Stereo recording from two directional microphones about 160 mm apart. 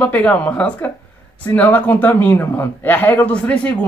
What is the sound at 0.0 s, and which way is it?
A man's voice, 10° left (ahead or behind).